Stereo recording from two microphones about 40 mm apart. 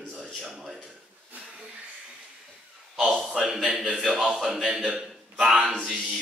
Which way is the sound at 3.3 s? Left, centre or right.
Centre.